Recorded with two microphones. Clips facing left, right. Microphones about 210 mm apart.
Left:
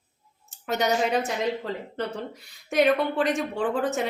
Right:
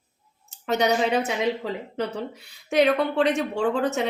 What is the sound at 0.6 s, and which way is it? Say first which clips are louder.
Speech: right 2 dB; centre (ahead or behind).